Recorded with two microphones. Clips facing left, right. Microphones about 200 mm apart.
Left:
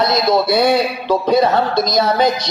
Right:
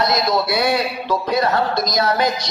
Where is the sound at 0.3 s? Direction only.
25° left (ahead or behind).